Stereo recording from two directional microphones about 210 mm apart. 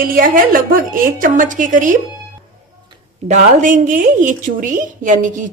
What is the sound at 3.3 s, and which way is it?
A woman's voice, 40° right (ahead or behind).